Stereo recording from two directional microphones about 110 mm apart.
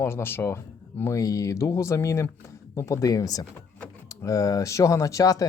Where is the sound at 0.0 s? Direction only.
20° left (ahead or behind).